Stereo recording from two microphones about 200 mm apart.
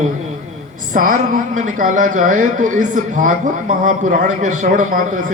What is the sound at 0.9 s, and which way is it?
A man's voice, 40° right (ahead or behind).